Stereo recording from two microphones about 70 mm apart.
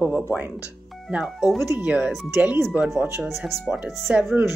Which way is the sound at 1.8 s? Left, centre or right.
Centre.